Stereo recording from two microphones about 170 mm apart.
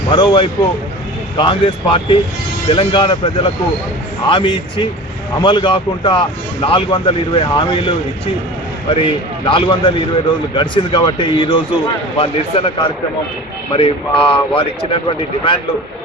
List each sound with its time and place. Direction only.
0.1 s speech: 30° left (ahead or behind)
9.0 s speech: 30° left (ahead or behind)
13.7 s speech: 30° left (ahead or behind)